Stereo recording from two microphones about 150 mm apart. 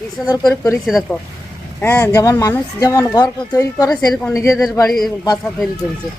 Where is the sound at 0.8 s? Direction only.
Centre (ahead or behind).